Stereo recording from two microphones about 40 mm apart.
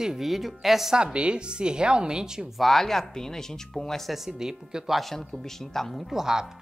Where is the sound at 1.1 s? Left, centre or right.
Right.